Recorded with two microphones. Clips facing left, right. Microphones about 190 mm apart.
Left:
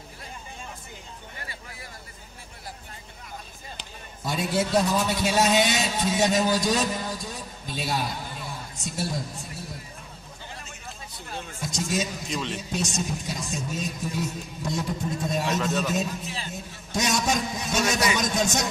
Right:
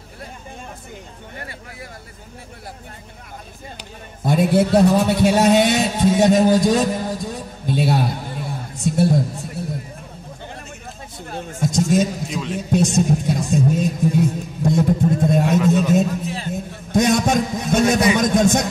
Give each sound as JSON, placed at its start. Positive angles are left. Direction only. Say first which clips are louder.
{"t": 1.3, "sound": "speech", "louder": "right 9 dB", "side_deg": -55}
{"t": 4.2, "sound": "a man's voice", "louder": "right 10 dB", "side_deg": -55}
{"t": 11.1, "sound": "speech", "louder": "right 9 dB", "side_deg": -50}
{"t": 12.3, "sound": "a man's voice", "louder": "right 4 dB", "side_deg": -5}
{"t": 12.5, "sound": "a man's voice", "louder": "right 11 dB", "side_deg": -55}
{"t": 15.6, "sound": "a sound", "louder": "right 9 dB", "side_deg": -10}
{"t": 15.9, "sound": "a sound", "louder": "right 10 dB", "side_deg": -50}